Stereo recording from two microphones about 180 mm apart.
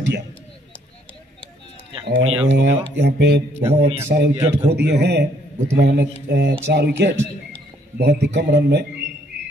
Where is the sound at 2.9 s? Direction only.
65° right (ahead or behind).